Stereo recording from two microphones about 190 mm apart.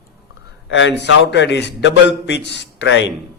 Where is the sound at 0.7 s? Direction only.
70° left (ahead or behind).